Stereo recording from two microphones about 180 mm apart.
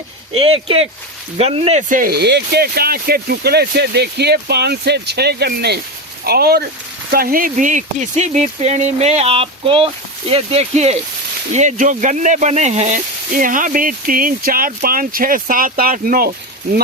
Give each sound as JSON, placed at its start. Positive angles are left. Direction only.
{"t": 0.3, "sound": "speech", "side_deg": -30}
{"t": 1.9, "sound": "speech", "side_deg": -55}